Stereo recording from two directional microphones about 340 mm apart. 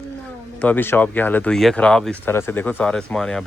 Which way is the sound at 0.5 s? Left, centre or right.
Centre.